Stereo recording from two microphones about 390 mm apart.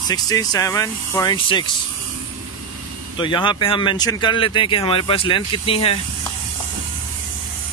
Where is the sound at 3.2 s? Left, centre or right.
Centre.